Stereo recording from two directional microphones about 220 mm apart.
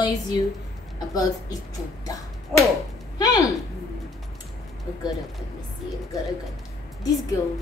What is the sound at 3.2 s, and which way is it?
Speech, 15° left (ahead or behind).